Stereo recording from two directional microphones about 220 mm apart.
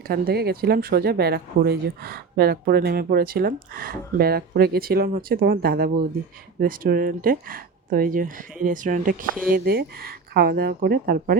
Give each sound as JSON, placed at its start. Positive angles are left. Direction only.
{"t": 0.1, "sound": "speech", "side_deg": -45}